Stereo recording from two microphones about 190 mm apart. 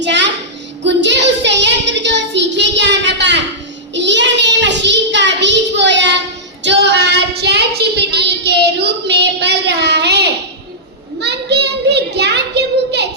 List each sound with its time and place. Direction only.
0.0 s child singing: 65° right (ahead or behind)